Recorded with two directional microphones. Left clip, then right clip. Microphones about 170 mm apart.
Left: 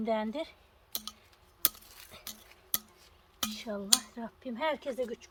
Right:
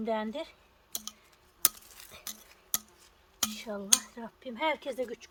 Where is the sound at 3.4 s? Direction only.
20° right (ahead or behind).